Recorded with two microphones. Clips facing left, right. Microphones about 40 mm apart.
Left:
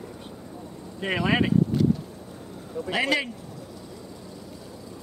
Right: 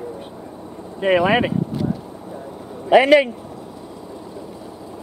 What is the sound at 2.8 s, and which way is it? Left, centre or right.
Speech, right.